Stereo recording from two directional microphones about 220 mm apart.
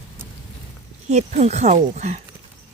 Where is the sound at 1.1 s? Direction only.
30° right (ahead or behind).